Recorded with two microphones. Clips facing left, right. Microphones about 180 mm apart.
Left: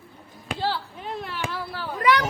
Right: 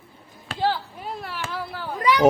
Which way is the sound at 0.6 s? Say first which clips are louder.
Right 4 dB; 15° right (ahead or behind).